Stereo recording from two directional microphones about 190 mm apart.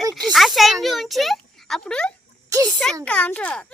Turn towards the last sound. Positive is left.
turn(degrees=5)  # may be behind; listen again after turning